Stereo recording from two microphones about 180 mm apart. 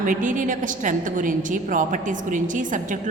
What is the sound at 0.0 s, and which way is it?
A woman's voice, 45° right (ahead or behind).